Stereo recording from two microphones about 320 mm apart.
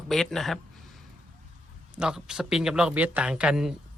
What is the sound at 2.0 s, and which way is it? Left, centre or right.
Speech, centre.